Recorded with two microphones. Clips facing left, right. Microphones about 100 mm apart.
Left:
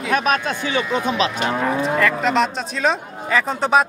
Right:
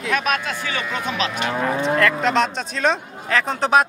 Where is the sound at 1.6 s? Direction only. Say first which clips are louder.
Right 1 dB; 5° left (ahead or behind).